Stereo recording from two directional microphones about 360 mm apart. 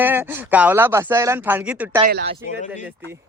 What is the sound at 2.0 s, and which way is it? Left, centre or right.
Speech, right.